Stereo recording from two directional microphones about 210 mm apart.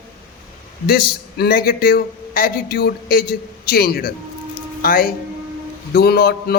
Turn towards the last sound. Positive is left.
turn(degrees=50)  # may be behind; listen again after turning